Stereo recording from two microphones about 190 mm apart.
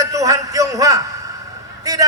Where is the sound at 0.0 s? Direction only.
15° right (ahead or behind).